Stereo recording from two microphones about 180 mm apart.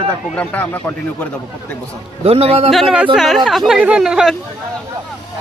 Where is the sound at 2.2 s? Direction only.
35° right (ahead or behind).